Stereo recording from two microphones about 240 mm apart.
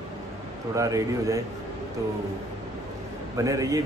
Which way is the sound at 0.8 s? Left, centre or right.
Centre.